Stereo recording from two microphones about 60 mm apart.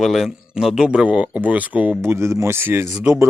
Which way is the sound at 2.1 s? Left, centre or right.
Right.